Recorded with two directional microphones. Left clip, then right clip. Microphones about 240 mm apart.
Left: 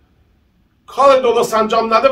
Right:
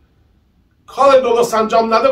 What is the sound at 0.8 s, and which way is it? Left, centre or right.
A man's voice, centre.